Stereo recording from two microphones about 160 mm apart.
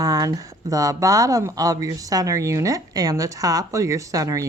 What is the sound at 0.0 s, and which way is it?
A woman's voice, 20° right (ahead or behind).